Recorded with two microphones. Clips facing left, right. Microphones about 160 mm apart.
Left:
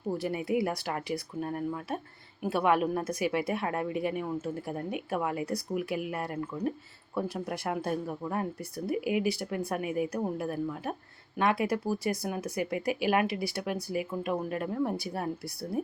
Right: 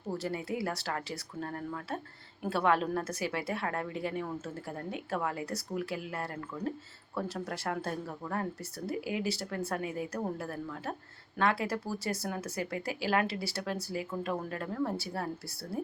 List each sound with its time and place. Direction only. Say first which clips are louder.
0.1 s a woman's voice: left 5 dB; 15° left (ahead or behind)